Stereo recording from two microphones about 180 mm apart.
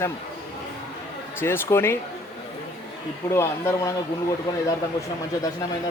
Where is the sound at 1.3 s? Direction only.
10° left (ahead or behind).